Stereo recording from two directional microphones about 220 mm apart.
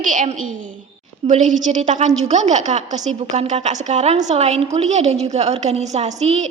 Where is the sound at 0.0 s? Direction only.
35° right (ahead or behind).